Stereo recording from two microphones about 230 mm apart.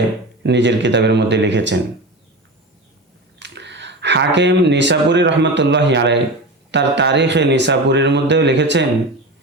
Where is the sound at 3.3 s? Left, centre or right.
Right.